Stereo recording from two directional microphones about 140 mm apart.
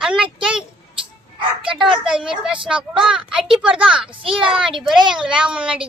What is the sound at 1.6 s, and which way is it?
Speech, 5° right (ahead or behind).